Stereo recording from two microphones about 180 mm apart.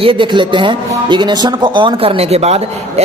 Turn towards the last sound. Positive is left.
turn(degrees=-35)  # may be behind; listen again after turning